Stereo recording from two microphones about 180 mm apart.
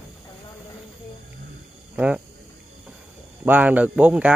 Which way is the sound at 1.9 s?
5° right (ahead or behind).